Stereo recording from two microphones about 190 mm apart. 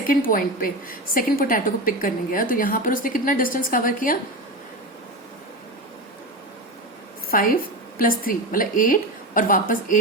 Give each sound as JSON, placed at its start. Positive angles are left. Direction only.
{"t": 0.1, "sound": "a woman's voice", "side_deg": 50}
{"t": 7.3, "sound": "a woman's voice", "side_deg": 50}